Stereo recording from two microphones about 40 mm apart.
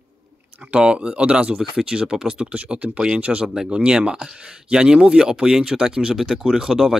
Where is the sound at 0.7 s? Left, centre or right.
Right.